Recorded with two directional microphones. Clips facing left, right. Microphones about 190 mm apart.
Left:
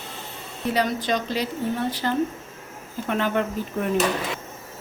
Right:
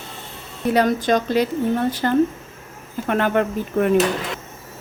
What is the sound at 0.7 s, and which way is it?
Speech, 50° right (ahead or behind).